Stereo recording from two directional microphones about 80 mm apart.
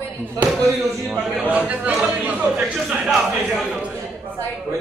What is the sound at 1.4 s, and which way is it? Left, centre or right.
A man's voice, centre.